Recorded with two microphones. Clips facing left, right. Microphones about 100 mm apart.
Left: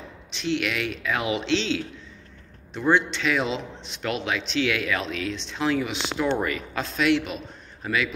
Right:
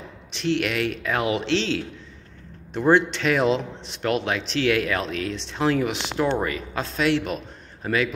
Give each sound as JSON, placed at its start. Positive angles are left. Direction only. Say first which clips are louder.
{"t": 0.4, "sound": "a man's voice", "louder": "right 3 dB", "side_deg": -45}
{"t": 2.9, "sound": "a man's voice", "louder": "right 3 dB", "side_deg": -45}
{"t": 6.2, "sound": "a man's voice", "louder": "right 1 dB", "side_deg": -25}